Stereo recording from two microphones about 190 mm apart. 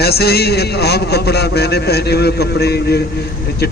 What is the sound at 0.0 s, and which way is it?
A man's voice, 55° left (ahead or behind).